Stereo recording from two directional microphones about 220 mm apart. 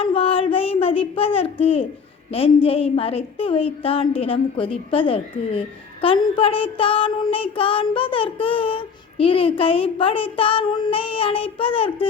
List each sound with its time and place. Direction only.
0.0 s child singing: 25° left (ahead or behind)
2.3 s speech: 25° left (ahead or behind)